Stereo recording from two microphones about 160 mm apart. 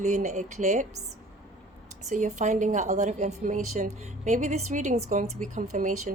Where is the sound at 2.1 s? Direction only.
50° right (ahead or behind).